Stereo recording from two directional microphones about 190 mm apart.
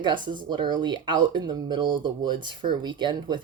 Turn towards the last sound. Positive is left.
turn(degrees=-25)  # may be behind; listen again after turning